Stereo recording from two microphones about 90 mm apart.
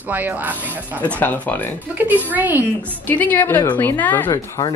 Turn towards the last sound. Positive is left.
turn(degrees=45)  # may be behind; listen again after turning